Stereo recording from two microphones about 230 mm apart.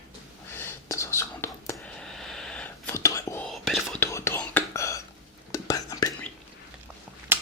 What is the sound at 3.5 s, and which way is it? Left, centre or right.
Whispering, centre.